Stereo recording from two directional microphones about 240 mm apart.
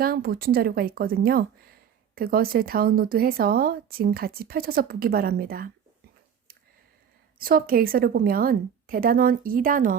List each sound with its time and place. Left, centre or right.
0.0 s speech: right
7.3 s speech: right